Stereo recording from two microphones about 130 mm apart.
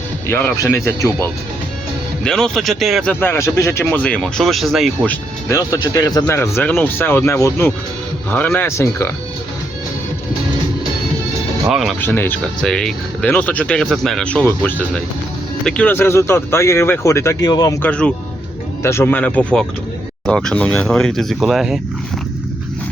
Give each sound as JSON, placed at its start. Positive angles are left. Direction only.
{"t": 0.3, "sound": "speech", "side_deg": 15}
{"t": 2.2, "sound": "speech", "side_deg": 5}
{"t": 5.0, "sound": "speech", "side_deg": 25}
{"t": 11.7, "sound": "speech", "side_deg": 0}
{"t": 11.9, "sound": "speech", "side_deg": 15}
{"t": 12.6, "sound": "speech", "side_deg": 5}
{"t": 17.8, "sound": "speech", "side_deg": 10}
{"t": 18.8, "sound": "speech", "side_deg": 20}